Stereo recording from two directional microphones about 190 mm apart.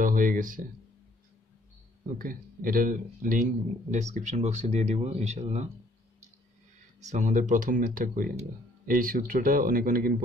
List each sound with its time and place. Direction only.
0.0 s a sound: 45° right (ahead or behind)
2.1 s speech: 50° right (ahead or behind)
7.0 s speech: 40° right (ahead or behind)